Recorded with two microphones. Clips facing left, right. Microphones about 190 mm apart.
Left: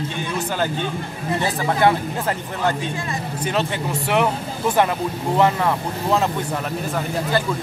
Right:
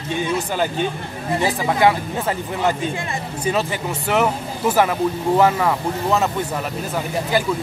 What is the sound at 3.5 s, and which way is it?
Speech, 5° right (ahead or behind).